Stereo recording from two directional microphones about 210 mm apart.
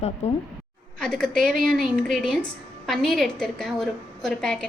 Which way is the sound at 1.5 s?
40° right (ahead or behind).